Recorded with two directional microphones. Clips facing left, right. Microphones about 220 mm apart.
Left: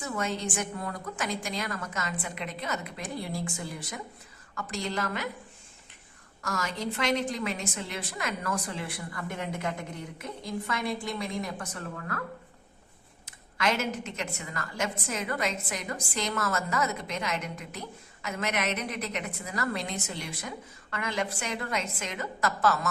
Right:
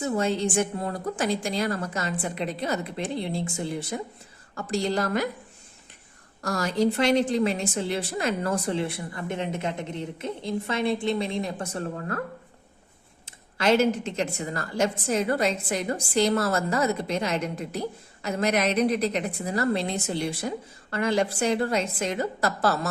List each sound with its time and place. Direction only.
0.0 s a woman's voice: 30° right (ahead or behind)
6.4 s a woman's voice: 35° right (ahead or behind)
13.2 s a woman's voice: 30° right (ahead or behind)